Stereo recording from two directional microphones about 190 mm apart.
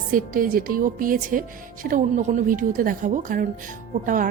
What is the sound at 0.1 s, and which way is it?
A woman's voice, 45° right (ahead or behind).